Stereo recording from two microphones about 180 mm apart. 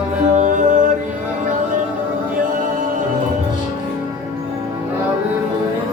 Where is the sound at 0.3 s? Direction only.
45° right (ahead or behind).